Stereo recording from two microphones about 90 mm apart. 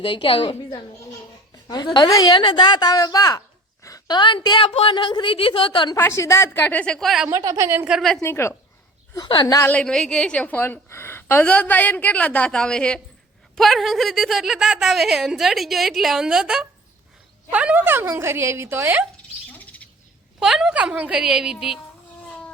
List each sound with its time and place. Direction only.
0.0 s a woman's voice: 75° left (ahead or behind)
1.6 s a woman's voice: 50° left (ahead or behind)
6.0 s a woman's voice: 30° left (ahead or behind); by 7.1 s 10° left (ahead or behind)
7.3 s a woman's voice: 40° right (ahead or behind)
7.9 s a woman's voice: 5° right (ahead or behind)
8.2 s a woman's voice: 30° left (ahead or behind)
9.1 s a woman's voice: 55° left (ahead or behind)
9.8 s a woman's voice: 5° left (ahead or behind); by 19.0 s 25° right (ahead or behind)
19.1 s rodents: 15° left (ahead or behind)
20.4 s a woman's voice: 5° right (ahead or behind)